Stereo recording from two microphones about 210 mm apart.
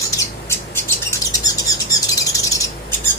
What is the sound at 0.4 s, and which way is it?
Bird, 10° left (ahead or behind).